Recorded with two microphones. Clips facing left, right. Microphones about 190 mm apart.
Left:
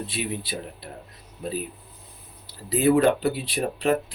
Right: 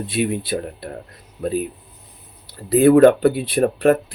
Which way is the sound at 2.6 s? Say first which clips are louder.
Right 8 dB; 55° right (ahead or behind).